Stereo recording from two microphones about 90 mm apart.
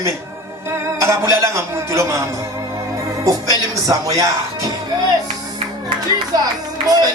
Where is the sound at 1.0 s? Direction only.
35° right (ahead or behind).